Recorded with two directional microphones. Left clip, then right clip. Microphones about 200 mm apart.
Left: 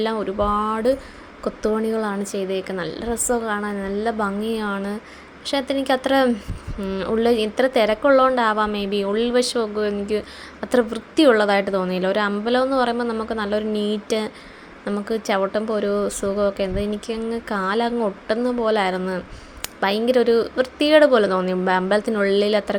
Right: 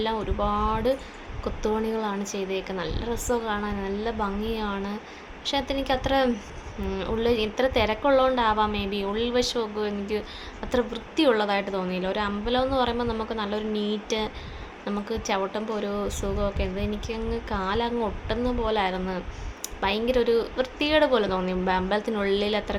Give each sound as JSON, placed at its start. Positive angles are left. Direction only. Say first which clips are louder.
{"t": 0.0, "sound": "a woman's voice", "louder": "left 5 dB", "side_deg": 20}